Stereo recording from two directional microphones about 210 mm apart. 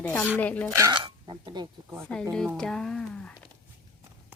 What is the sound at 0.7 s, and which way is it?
Speech, 15° right (ahead or behind).